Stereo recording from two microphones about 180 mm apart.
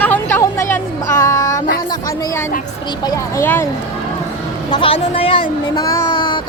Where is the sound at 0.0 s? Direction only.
10° left (ahead or behind).